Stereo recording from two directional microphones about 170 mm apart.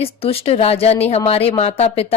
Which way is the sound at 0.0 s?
35° left (ahead or behind).